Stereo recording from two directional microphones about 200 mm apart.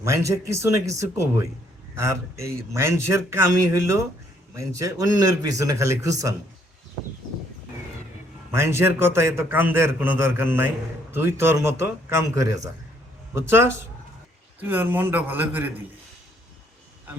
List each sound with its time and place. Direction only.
0.0 s a man's voice: 15° right (ahead or behind)
8.5 s a man's voice: 15° right (ahead or behind)